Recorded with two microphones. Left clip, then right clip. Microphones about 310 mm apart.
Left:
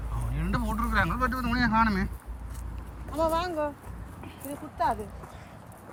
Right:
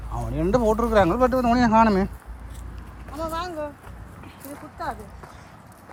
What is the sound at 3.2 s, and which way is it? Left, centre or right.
Speech, centre.